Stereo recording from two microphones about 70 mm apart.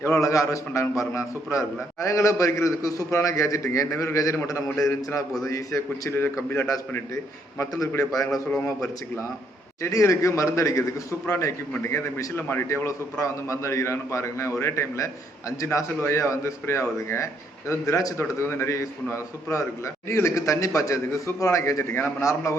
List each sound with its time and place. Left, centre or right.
0.0 s a man's voice: left
9.8 s a man's voice: left
12.6 s a man's voice: left
18.2 s a man's voice: left